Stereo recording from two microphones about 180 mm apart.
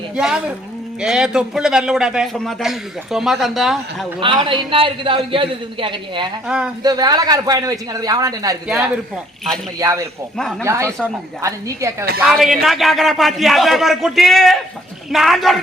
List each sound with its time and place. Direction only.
0.2 s a man's voice: 5° right (ahead or behind)
4.2 s a man's voice: 30° right (ahead or behind)
8.6 s a man's voice: 5° right (ahead or behind)
9.7 s a woman's voice: 20° right (ahead or behind)
12.2 s a man's voice: centre (ahead or behind)